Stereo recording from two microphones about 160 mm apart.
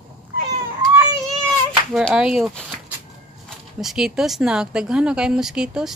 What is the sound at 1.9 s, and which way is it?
Speech, 5° right (ahead or behind).